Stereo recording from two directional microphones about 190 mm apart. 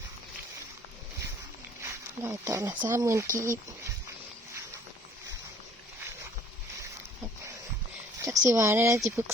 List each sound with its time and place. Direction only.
1.8 s speech: 15° right (ahead or behind)
8.2 s speech: 15° right (ahead or behind)